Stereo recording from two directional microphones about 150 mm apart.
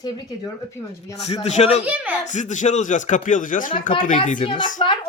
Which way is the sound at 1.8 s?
10° right (ahead or behind).